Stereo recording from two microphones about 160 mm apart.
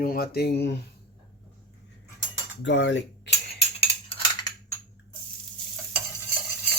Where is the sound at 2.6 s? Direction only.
90° left.